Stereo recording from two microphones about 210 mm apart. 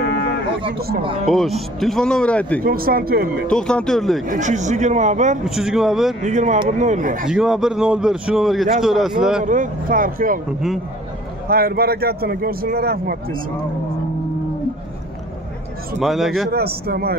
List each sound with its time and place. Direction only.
0.0 s cattle: 55° left (ahead or behind)
1.2 s a man's voice: centre (ahead or behind)
2.6 s speech: 45° right (ahead or behind)
3.4 s a man's voice: 5° left (ahead or behind)
4.3 s speech: 35° right (ahead or behind)
5.4 s a man's voice: centre (ahead or behind)
6.2 s speech: 35° right (ahead or behind)
7.2 s a man's voice: centre (ahead or behind)
9.4 s speech: 40° right (ahead or behind)
11.4 s speech: 45° right (ahead or behind)
16.0 s a man's voice: centre (ahead or behind)
16.5 s speech: 45° right (ahead or behind)